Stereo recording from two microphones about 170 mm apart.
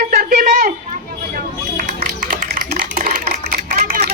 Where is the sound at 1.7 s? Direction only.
50° right (ahead or behind).